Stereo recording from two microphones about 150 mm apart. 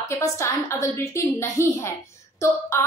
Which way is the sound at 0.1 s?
20° left (ahead or behind).